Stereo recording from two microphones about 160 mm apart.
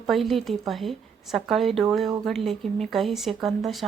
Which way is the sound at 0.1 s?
Centre (ahead or behind).